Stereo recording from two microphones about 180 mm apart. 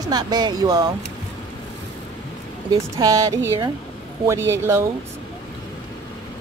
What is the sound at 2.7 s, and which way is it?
Speech, 20° right (ahead or behind).